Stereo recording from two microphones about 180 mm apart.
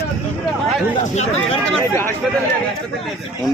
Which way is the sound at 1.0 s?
40° left (ahead or behind).